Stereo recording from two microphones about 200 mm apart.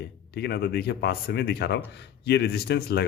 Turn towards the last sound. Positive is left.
turn(degrees=55)  # may be behind; listen again after turning